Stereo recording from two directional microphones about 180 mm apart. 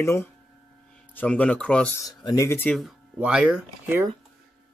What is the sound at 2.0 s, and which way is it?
Speech, 20° left (ahead or behind).